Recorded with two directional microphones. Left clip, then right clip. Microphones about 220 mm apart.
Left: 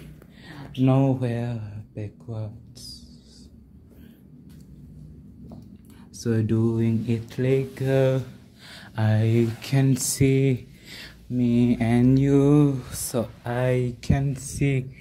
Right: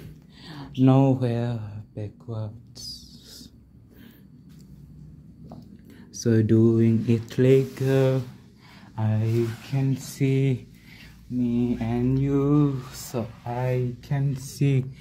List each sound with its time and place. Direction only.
0.5 s speech: 20° right (ahead or behind)
6.1 s speech: 15° right (ahead or behind)
7.7 s speech: centre (ahead or behind)
8.6 s speech: 15° left (ahead or behind)
10.2 s speech: 5° left (ahead or behind)
11.3 s speech: 20° left (ahead or behind)
14.6 s speech: 10° right (ahead or behind)